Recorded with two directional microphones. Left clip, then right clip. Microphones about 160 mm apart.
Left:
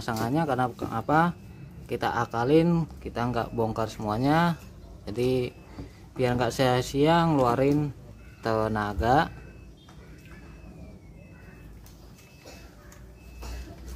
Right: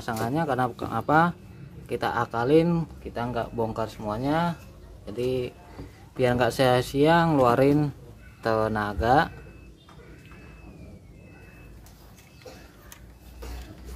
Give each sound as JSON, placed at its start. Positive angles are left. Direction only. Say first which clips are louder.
{"t": 0.0, "sound": "speech", "louder": "even", "side_deg": 10}
{"t": 0.6, "sound": "speech", "louder": "right 1 dB", "side_deg": -5}
{"t": 3.0, "sound": "speech", "louder": "even", "side_deg": 20}
{"t": 4.1, "sound": "speech", "louder": "left 2 dB", "side_deg": 35}
{"t": 6.1, "sound": "speech", "louder": "right 3 dB", "side_deg": -10}
{"t": 7.5, "sound": "speech", "louder": "right 3 dB", "side_deg": -20}
{"t": 8.4, "sound": "speech", "louder": "right 2 dB", "side_deg": 0}